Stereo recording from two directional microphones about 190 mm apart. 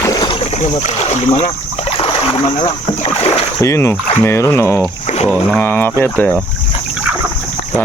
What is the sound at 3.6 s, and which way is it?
Speech, 15° left (ahead or behind).